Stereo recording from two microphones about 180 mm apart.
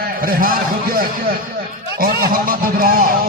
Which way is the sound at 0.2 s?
50° right (ahead or behind).